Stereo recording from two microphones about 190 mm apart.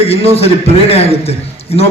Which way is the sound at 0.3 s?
30° left (ahead or behind).